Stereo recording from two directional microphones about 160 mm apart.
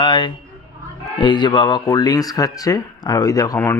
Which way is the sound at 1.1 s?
30° left (ahead or behind).